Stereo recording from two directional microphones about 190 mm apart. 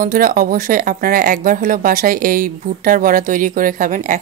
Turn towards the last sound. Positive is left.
turn(degrees=-45)  # may be behind; listen again after turning